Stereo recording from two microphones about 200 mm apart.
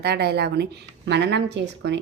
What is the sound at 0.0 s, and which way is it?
A woman's voice, 55° right (ahead or behind).